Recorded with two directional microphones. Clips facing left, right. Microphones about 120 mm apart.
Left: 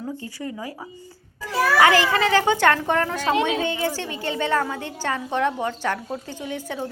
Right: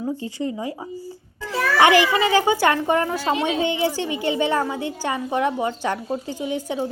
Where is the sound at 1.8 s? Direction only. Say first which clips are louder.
Right 3 dB; 15° right (ahead or behind).